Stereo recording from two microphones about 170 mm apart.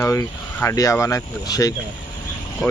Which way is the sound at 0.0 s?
15° left (ahead or behind).